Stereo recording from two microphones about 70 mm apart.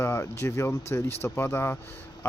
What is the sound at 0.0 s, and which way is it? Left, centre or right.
Speech, left.